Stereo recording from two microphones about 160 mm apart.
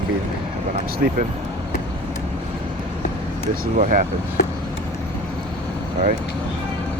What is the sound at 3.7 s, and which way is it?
Speech, 55° right (ahead or behind).